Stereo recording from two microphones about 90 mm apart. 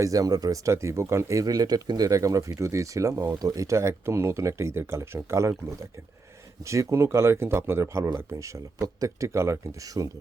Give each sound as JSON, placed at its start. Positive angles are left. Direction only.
{"t": 0.0, "sound": "speech", "side_deg": -40}